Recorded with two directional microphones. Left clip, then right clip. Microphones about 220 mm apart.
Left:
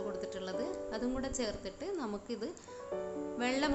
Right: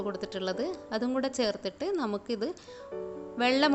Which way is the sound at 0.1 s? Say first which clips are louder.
Right 5 dB; 35° right (ahead or behind).